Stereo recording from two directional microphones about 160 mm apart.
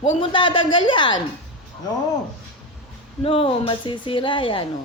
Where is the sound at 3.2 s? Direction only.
35° left (ahead or behind).